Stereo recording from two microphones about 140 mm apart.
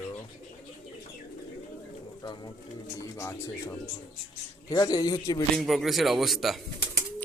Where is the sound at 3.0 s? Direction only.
20° left (ahead or behind).